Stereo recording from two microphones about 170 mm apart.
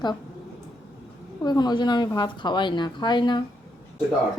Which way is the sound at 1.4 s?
25° left (ahead or behind).